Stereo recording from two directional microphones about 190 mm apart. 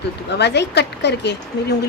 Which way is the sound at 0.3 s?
65° left (ahead or behind).